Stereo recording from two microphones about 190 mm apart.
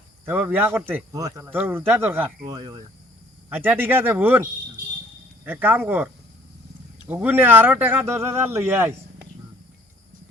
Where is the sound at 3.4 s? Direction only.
10° right (ahead or behind).